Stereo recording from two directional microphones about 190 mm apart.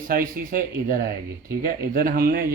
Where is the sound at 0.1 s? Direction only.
50° right (ahead or behind).